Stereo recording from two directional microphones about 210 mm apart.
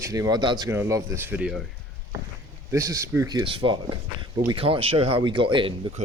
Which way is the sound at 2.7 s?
15° right (ahead or behind).